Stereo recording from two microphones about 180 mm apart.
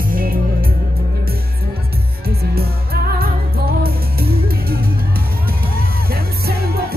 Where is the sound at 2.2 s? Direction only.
60° right (ahead or behind).